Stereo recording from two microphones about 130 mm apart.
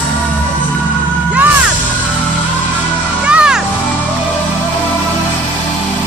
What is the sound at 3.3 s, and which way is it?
Music, 5° right (ahead or behind).